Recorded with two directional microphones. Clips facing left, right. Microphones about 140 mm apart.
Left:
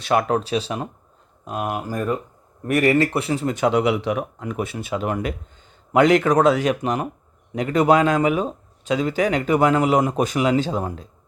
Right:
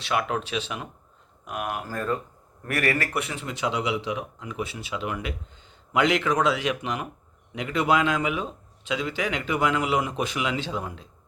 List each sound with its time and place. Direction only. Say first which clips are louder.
0.0 s speech: left 7 dB; 40° left (ahead or behind)
1.5 s speech: left 5 dB; 25° left (ahead or behind); by 11.1 s 40° left (ahead or behind)